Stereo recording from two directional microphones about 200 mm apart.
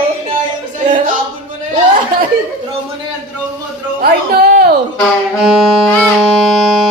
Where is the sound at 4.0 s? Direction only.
50° right (ahead or behind).